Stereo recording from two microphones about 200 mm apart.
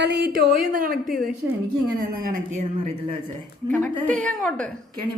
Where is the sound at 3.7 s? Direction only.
10° left (ahead or behind).